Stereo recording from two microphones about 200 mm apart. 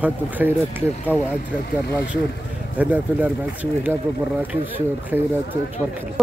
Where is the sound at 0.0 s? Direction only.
10° right (ahead or behind).